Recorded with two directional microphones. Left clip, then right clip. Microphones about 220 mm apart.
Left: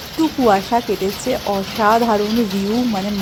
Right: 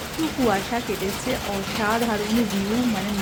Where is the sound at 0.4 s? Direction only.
20° left (ahead or behind).